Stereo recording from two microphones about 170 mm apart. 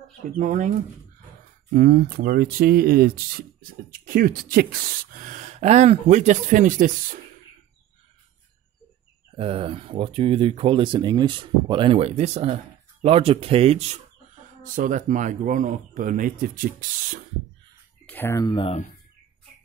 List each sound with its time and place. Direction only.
0.3 s speech: 50° right (ahead or behind)
1.7 s speech: 60° right (ahead or behind)
9.4 s speech: 35° right (ahead or behind)
14.6 s speech: 50° right (ahead or behind)
18.0 s speech: 10° left (ahead or behind); by 18.8 s 30° left (ahead or behind)